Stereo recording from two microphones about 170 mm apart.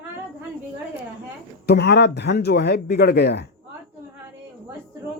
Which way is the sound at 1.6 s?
70° left (ahead or behind).